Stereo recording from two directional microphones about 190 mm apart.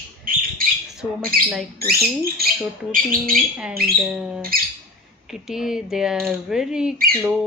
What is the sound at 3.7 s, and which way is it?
Speech, 55° right (ahead or behind).